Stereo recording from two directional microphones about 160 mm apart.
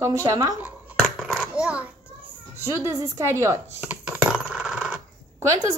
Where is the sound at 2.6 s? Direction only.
15° right (ahead or behind).